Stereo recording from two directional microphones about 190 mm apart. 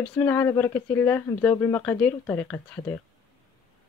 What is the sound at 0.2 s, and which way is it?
Speech, 10° left (ahead or behind).